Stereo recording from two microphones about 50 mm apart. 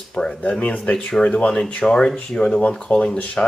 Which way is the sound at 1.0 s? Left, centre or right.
Centre.